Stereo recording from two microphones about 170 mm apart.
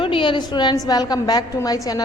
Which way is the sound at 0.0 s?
30° left (ahead or behind).